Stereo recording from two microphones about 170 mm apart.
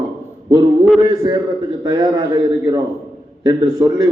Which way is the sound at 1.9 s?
25° right (ahead or behind).